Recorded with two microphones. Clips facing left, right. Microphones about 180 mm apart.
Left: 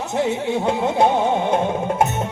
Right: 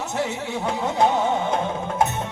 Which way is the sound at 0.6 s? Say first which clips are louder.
Left 3 dB; 25° left (ahead or behind).